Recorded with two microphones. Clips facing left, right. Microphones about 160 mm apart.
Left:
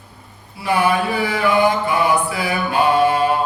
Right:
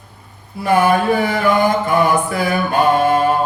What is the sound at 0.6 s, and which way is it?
Mantra, 45° right (ahead or behind).